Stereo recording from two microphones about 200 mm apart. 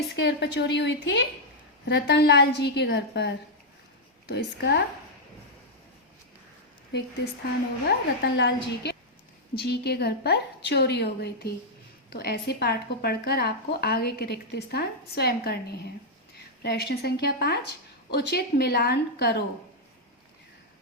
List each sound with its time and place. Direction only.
0.2 s a woman's voice: 60° left (ahead or behind)
7.9 s a woman's voice: 60° left (ahead or behind)
16.6 s a woman's voice: 50° left (ahead or behind)